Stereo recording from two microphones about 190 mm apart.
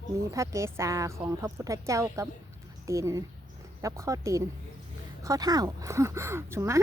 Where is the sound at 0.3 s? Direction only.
15° right (ahead or behind).